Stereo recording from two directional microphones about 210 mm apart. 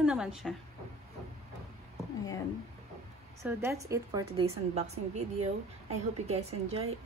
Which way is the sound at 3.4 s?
10° right (ahead or behind).